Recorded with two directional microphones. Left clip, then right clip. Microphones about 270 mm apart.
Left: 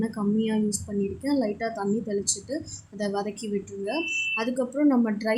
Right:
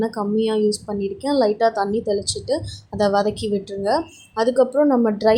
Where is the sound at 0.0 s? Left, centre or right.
Centre.